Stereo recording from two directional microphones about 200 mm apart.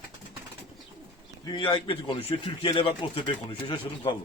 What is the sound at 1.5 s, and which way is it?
Speech, 25° left (ahead or behind).